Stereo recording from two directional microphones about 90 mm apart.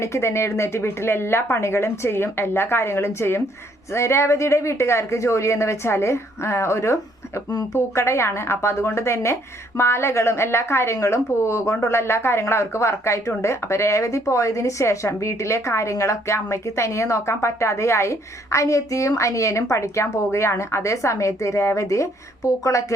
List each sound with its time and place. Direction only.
0.0 s a woman's voice: 30° left (ahead or behind)